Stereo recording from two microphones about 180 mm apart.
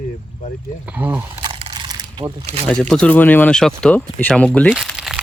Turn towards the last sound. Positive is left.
turn(degrees=-5)  # may be behind; listen again after turning